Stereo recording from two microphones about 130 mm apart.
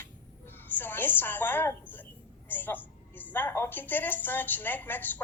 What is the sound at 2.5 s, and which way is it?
A woman's voice, 15° left (ahead or behind).